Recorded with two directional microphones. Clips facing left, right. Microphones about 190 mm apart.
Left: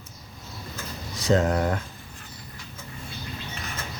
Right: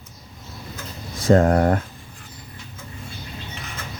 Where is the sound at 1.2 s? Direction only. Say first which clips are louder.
Right 6 dB; 50° right (ahead or behind).